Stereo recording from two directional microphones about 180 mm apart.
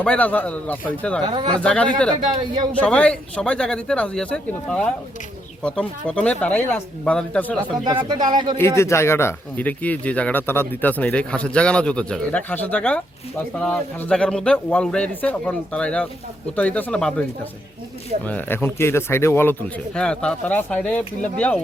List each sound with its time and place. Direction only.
0.0 s speech: 5° left (ahead or behind)
1.3 s speech: 25° right (ahead or behind)
1.6 s speech: 5° left (ahead or behind)
2.3 s speech: 25° right (ahead or behind)
2.8 s speech: 5° left (ahead or behind)
7.9 s speech: 25° right (ahead or behind)
8.5 s speech: 15° left (ahead or behind)
18.3 s speech: 10° left (ahead or behind)